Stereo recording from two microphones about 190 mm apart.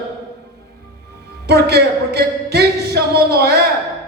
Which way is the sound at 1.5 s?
60° right (ahead or behind).